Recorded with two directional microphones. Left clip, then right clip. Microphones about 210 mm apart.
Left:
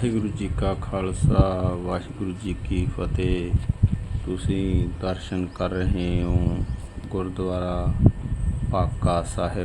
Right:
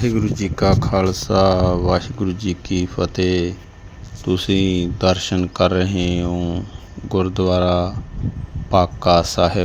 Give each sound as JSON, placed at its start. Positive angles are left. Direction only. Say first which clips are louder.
{"t": 0.0, "sound": "speech", "louder": "right 6 dB", "side_deg": -25}
{"t": 7.1, "sound": "speech", "louder": "right 10 dB", "side_deg": -25}